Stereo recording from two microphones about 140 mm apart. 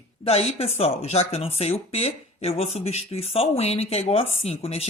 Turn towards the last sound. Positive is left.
turn(degrees=45)  # may be behind; listen again after turning